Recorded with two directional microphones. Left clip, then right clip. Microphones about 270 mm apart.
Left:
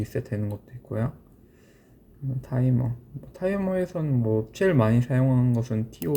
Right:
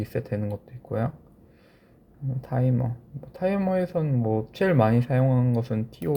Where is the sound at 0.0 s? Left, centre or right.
Centre.